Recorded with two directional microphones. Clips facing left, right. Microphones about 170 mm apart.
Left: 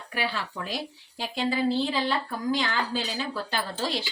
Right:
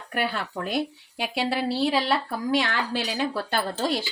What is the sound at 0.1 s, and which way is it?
A woman's voice, 55° right (ahead or behind).